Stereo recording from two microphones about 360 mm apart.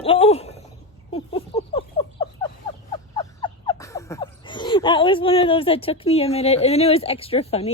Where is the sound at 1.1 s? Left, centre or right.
Centre.